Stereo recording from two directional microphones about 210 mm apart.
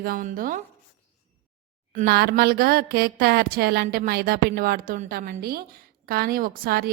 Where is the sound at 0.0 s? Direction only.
40° right (ahead or behind).